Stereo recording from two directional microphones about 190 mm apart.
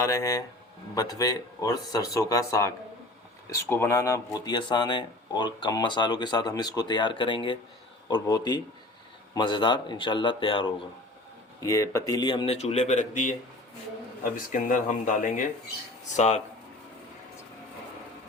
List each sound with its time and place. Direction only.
0.0 s speech: 15° left (ahead or behind)
11.6 s speech: 15° left (ahead or behind); by 13.3 s 40° left (ahead or behind)
14.3 s speech: 45° left (ahead or behind)